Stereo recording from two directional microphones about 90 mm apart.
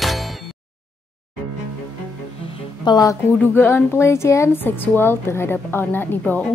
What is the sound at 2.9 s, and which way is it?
Speech, 60° left (ahead or behind).